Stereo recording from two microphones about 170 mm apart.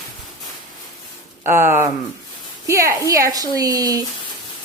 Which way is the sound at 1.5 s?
15° right (ahead or behind).